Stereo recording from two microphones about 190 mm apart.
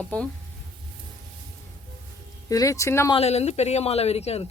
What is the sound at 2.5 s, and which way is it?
Speech, 15° left (ahead or behind).